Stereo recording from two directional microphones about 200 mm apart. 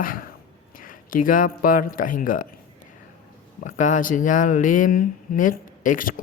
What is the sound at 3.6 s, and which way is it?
Speech, 40° left (ahead or behind).